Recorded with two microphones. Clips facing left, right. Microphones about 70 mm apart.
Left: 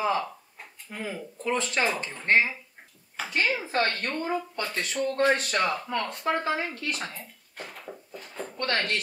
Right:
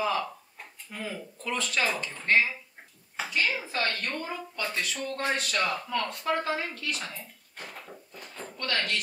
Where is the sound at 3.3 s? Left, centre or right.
Left.